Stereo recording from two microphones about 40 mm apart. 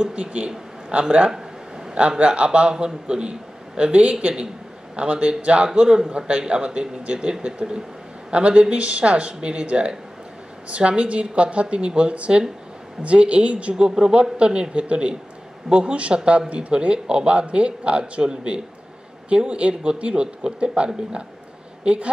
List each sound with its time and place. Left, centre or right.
0.1 s a man's voice: right
2.0 s a man's voice: right
5.7 s a man's voice: centre
13.7 s a man's voice: right